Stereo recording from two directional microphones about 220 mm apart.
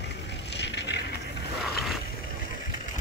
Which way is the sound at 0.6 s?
50° left (ahead or behind).